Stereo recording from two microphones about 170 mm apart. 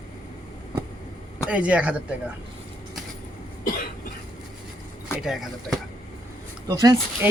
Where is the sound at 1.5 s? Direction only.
5° right (ahead or behind).